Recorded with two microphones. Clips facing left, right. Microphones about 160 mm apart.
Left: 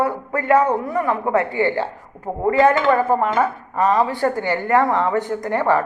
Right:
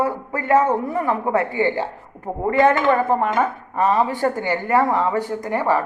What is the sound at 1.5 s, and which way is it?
Speech, 15° right (ahead or behind).